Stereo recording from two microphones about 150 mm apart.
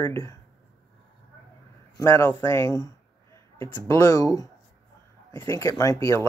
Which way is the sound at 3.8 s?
15° left (ahead or behind).